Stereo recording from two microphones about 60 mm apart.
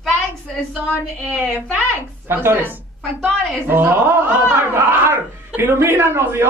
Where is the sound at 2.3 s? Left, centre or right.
Right.